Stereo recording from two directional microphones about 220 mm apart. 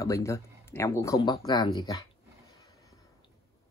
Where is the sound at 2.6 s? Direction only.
15° left (ahead or behind).